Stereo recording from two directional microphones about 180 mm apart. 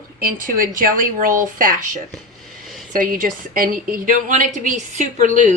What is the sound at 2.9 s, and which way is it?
A woman's voice, 45° right (ahead or behind).